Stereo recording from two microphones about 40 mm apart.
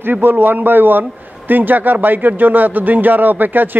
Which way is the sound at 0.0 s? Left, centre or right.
Right.